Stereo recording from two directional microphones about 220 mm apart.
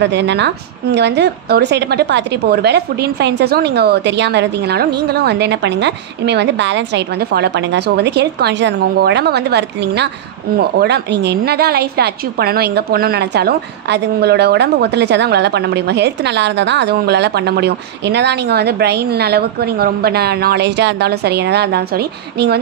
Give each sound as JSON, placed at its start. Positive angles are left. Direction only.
{"t": 0.0, "sound": "a woman's voice", "side_deg": -50}